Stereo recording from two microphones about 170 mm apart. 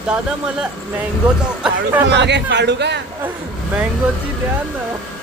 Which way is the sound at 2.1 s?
90° right.